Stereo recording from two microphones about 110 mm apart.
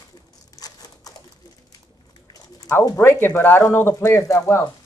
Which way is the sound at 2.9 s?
20° left (ahead or behind).